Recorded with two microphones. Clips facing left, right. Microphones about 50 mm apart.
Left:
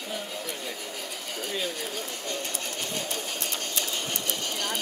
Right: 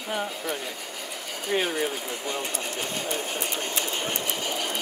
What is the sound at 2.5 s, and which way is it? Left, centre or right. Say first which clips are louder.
Sewing machine: right 3 dB; centre.